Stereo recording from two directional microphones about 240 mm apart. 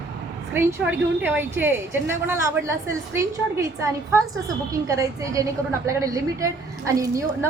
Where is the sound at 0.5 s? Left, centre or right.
Centre.